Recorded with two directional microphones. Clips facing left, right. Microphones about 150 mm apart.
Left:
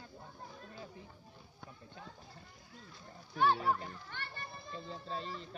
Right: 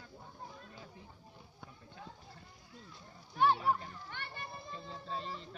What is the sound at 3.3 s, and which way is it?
A child's voice, 15° right (ahead or behind).